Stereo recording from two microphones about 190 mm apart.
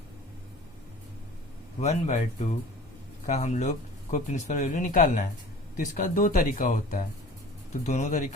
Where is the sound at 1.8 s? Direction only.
35° left (ahead or behind).